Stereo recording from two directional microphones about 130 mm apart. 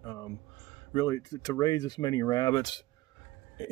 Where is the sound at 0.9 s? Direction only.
30° left (ahead or behind).